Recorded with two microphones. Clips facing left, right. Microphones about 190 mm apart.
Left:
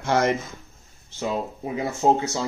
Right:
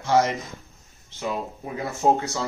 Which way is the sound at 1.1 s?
25° left (ahead or behind).